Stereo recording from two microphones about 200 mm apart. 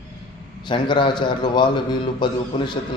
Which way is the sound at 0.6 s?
25° left (ahead or behind).